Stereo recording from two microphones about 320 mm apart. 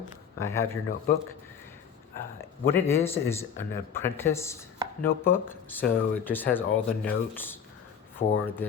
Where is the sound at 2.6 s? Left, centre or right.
Centre.